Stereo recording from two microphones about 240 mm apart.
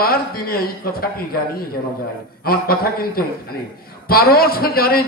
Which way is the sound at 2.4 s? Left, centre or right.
Left.